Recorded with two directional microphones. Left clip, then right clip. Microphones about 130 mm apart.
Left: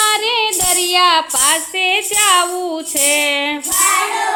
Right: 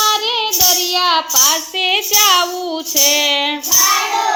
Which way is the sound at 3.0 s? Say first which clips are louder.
Right 2 dB; 10° left (ahead or behind).